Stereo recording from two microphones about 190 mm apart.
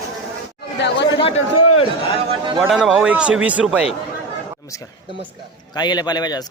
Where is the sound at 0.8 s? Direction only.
65° left (ahead or behind).